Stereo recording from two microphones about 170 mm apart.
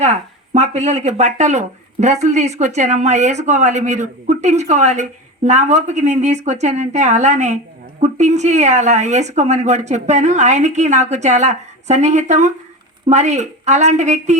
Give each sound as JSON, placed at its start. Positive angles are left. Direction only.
{"t": 0.0, "sound": "speech", "side_deg": -40}